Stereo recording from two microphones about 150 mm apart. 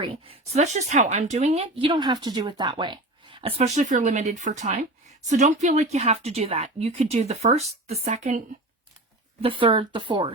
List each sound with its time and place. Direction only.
0.0 s speech: 40° right (ahead or behind)
3.8 s a woman's voice: 55° right (ahead or behind)
9.4 s speech: 35° right (ahead or behind)